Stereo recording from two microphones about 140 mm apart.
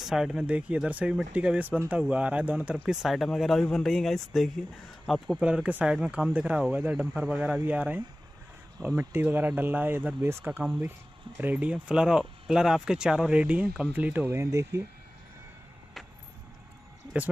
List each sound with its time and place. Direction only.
0.0 s speech: 5° right (ahead or behind); by 14.8 s 20° right (ahead or behind)